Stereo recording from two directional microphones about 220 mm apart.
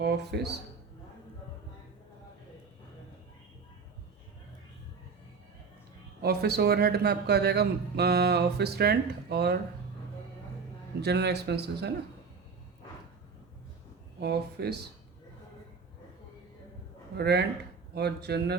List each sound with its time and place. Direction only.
0.0 s a man's voice: 50° right (ahead or behind)
6.2 s a man's voice: 45° right (ahead or behind)
11.0 s a man's voice: 50° right (ahead or behind)
14.2 s a man's voice: 50° right (ahead or behind)
17.2 s a man's voice: 45° right (ahead or behind)